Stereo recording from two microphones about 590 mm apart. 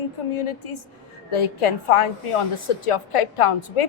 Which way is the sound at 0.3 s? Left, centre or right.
Left.